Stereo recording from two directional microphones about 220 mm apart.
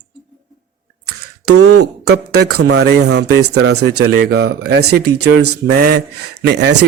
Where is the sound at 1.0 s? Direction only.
90° right.